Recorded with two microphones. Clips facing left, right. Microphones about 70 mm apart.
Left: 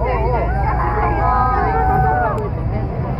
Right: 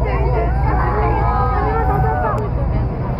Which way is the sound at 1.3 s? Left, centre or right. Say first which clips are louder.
Left 2 dB; left.